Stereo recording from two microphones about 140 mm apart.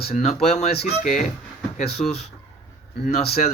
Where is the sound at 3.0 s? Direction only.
50° left (ahead or behind).